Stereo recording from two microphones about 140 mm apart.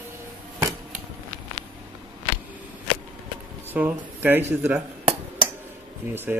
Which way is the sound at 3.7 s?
10° right (ahead or behind).